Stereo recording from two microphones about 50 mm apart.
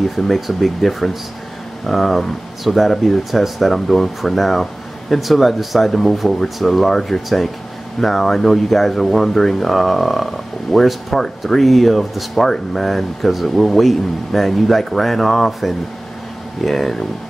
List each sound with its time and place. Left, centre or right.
0.1 s speech: centre